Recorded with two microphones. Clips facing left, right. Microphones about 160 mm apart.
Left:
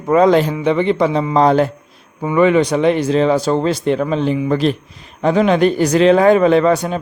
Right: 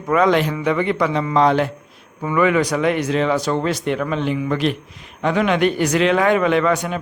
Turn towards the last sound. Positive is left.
turn(degrees=30)  # may be behind; listen again after turning